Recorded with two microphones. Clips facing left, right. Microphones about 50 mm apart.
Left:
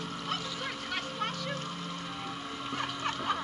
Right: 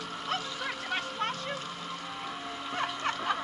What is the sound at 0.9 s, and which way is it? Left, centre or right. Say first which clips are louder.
Vehicle: right 3 dB; right.